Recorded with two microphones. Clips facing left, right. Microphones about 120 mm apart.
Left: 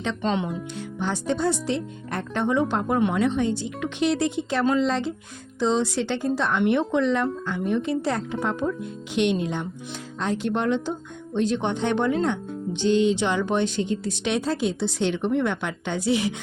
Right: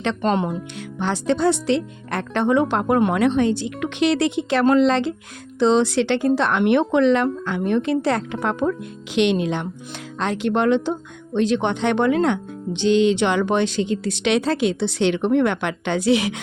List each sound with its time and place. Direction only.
0.2 s speech: 50° right (ahead or behind)
0.8 s speech: 80° right
4.6 s speech: 70° right (ahead or behind); by 9.6 s 90° right
10.2 s speech: 75° right (ahead or behind)